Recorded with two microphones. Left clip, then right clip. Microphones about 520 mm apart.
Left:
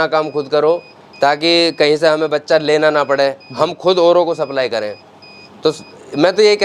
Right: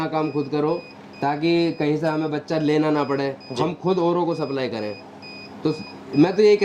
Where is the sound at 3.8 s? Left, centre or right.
Left.